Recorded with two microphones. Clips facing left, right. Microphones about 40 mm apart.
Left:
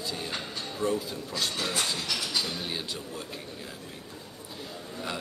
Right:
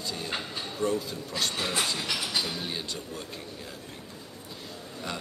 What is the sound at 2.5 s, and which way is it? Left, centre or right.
Speech, centre.